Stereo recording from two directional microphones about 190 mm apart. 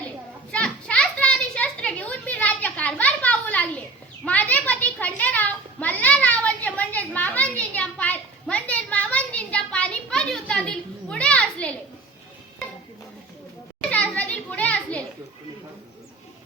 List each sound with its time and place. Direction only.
0.5 s children playing: 5° left (ahead or behind)
4.3 s a sound: 10° left (ahead or behind)
13.9 s children playing: 5° left (ahead or behind)